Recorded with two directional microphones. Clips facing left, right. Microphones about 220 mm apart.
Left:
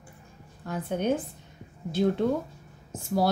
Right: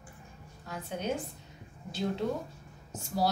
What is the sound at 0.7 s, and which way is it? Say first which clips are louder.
A woman's voice: left 7 dB; 55° left (ahead or behind).